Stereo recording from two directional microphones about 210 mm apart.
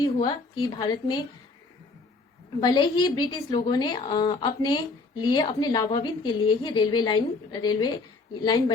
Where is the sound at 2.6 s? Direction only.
20° left (ahead or behind).